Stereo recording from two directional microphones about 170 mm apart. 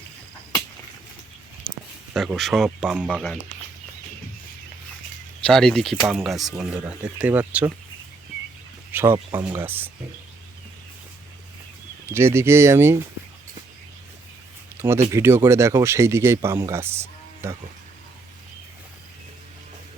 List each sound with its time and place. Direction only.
1.7 s a sound: centre (ahead or behind)
2.6 s speech: 10° right (ahead or behind)
5.4 s speech: 5° left (ahead or behind)
8.9 s speech: 10° right (ahead or behind)
12.0 s speech: 15° right (ahead or behind)
14.8 s speech: 15° right (ahead or behind)